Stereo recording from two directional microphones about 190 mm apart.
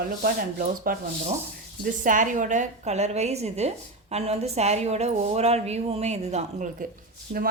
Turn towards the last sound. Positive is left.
turn(degrees=-50)  # may be behind; listen again after turning